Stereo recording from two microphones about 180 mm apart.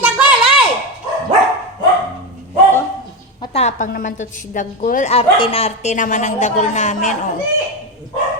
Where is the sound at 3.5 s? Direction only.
40° left (ahead or behind).